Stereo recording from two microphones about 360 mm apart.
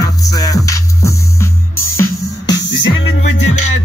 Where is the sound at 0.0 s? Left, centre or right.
Centre.